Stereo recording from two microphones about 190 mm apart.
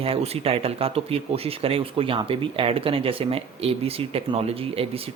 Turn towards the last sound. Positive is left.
turn(degrees=-30)  # may be behind; listen again after turning